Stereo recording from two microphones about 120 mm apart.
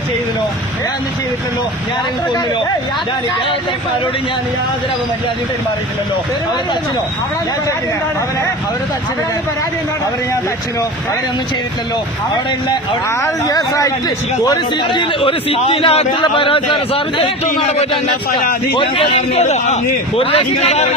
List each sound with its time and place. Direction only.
13.2 s a man's voice: 30° left (ahead or behind)
15.2 s a man's voice: 50° left (ahead or behind)
18.7 s a man's voice: 50° left (ahead or behind); by 20.9 s 65° left (ahead or behind)